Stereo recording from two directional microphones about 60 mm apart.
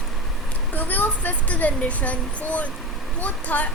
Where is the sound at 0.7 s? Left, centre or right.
Left.